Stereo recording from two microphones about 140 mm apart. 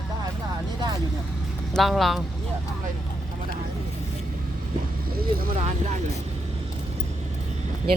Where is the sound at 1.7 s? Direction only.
Centre (ahead or behind).